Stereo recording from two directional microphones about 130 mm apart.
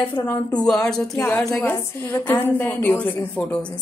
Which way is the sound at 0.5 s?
5° left (ahead or behind).